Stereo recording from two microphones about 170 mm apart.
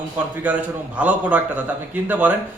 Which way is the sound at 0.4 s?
10° right (ahead or behind).